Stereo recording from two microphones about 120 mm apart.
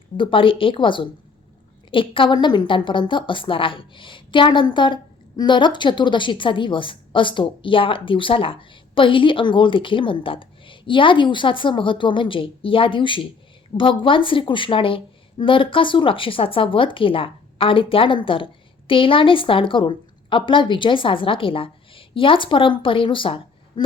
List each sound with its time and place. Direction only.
0.2 s a woman's voice: 45° left (ahead or behind)